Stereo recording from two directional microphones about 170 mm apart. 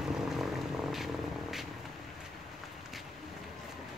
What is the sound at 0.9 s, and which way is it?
Vehicle, centre (ahead or behind).